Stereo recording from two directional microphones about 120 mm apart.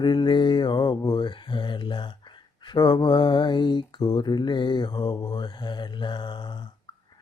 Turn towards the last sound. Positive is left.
turn(degrees=40)  # may be behind; listen again after turning